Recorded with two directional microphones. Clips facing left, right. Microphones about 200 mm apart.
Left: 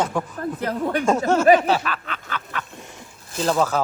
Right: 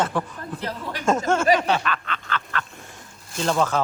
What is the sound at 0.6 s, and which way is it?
Speech, 55° left (ahead or behind).